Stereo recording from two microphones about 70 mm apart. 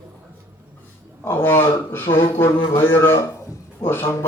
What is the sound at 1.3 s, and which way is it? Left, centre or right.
A man's voice, left.